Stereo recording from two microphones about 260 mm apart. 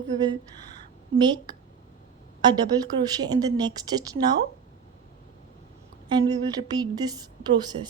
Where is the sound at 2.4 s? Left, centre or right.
Centre.